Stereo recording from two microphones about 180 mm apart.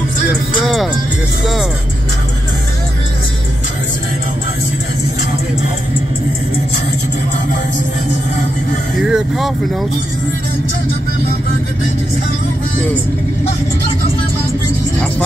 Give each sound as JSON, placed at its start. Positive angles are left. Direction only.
{"t": 9.0, "sound": "speech", "side_deg": -5}